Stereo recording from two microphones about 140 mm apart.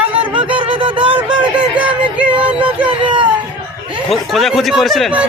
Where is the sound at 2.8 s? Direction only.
35° right (ahead or behind).